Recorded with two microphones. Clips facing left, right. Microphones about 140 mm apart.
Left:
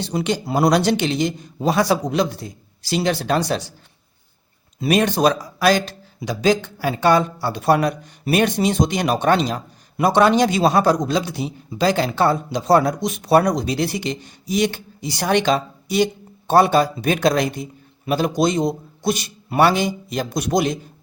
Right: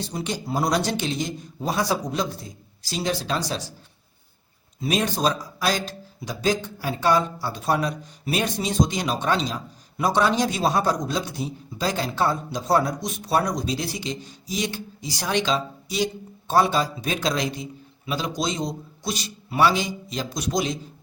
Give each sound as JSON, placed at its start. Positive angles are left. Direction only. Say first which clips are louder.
{"t": 0.0, "sound": "a man's voice", "louder": "left 7 dB", "side_deg": 80}
{"t": 4.8, "sound": "a man's voice", "louder": "left 6 dB", "side_deg": 65}